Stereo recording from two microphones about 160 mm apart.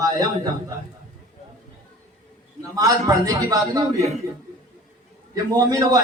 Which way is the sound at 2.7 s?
25° right (ahead or behind).